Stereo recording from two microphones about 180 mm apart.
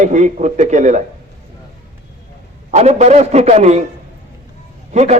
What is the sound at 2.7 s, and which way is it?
A man's voice, 40° right (ahead or behind).